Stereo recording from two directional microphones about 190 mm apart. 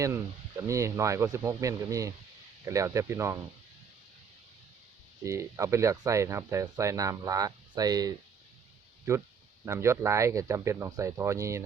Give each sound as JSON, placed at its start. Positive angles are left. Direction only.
{"t": 0.0, "sound": "speech", "side_deg": -15}
{"t": 5.2, "sound": "speech", "side_deg": -15}